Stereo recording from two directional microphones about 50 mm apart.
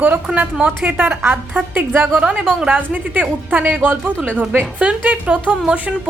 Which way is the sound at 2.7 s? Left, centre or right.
Right.